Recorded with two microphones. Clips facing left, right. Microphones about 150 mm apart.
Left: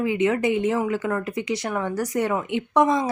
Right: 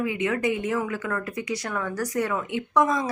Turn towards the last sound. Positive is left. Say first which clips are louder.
# left 3 dB
turn(degrees=25)  # may be behind; listen again after turning